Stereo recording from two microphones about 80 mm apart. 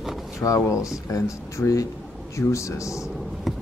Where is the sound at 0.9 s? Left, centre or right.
Left.